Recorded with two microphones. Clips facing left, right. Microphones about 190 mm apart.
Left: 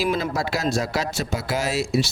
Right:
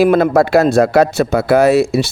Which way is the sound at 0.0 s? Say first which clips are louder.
Right 13 dB; 60° right (ahead or behind).